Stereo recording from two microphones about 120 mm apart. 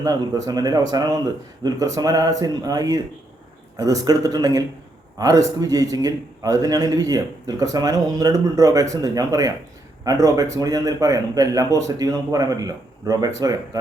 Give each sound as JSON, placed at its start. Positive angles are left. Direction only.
{"t": 0.0, "sound": "a man's voice", "side_deg": -30}